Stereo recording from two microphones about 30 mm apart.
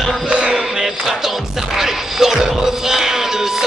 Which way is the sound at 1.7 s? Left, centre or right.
Centre.